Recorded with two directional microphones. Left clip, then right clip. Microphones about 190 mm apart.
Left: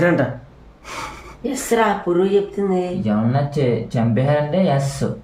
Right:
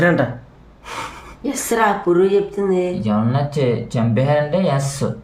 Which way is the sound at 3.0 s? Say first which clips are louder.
Even; 10° left (ahead or behind).